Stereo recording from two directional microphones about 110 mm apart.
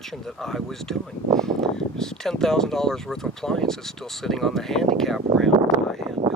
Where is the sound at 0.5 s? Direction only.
5° left (ahead or behind).